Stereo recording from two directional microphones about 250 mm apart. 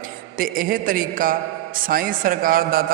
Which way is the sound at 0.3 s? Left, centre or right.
Right.